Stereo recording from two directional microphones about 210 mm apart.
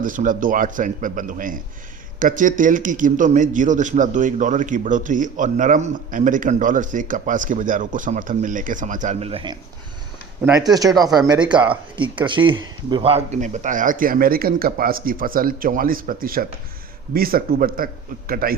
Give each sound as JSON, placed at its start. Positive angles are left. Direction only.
{"t": 0.0, "sound": "a man's voice", "side_deg": -40}
{"t": 10.4, "sound": "a man's voice", "side_deg": -15}